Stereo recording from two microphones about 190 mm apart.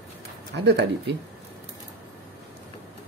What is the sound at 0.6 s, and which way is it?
Speech, 65° right (ahead or behind).